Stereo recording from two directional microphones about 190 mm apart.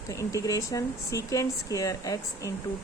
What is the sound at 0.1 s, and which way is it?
Speech, 15° left (ahead or behind).